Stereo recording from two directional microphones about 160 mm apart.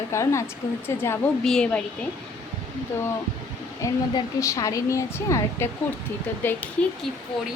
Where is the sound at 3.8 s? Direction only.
20° left (ahead or behind).